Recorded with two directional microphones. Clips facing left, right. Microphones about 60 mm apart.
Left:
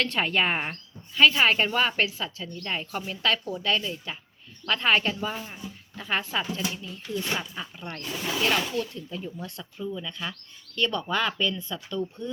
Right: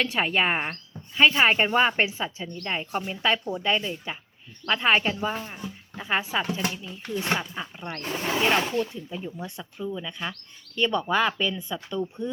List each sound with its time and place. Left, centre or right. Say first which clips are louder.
0.0 s speech: right 1 dB; centre
5.5 s a sound: right 3 dB; right
6.0 s speech: right 2 dB; centre
6.6 s speech: right 3 dB; right
7.5 s speech: right 2 dB; centre
8.0 s speech: right 3 dB; right; by 12.3 s centre